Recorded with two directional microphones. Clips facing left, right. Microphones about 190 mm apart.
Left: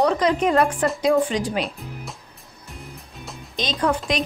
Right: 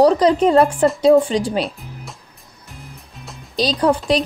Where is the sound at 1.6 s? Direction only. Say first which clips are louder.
Right 2 dB; centre (ahead or behind).